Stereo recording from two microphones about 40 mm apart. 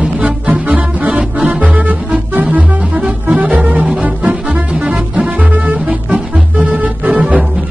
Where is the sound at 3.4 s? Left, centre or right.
Right.